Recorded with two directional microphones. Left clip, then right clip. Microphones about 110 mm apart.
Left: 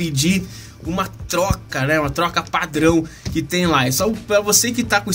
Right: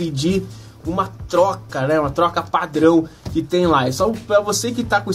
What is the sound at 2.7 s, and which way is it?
Speech, 5° right (ahead or behind).